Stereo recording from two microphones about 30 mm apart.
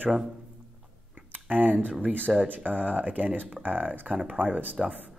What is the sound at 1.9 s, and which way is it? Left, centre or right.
Speech, right.